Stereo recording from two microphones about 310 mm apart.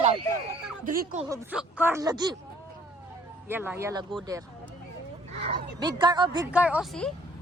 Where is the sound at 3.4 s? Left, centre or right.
Centre.